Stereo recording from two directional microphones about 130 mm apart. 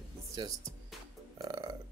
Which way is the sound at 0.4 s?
35° right (ahead or behind).